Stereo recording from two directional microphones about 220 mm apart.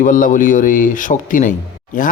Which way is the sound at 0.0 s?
35° left (ahead or behind).